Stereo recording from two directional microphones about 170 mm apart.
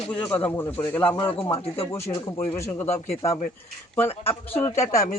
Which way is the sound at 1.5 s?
35° left (ahead or behind).